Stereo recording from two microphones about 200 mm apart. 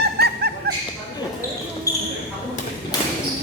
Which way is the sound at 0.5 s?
55° right (ahead or behind).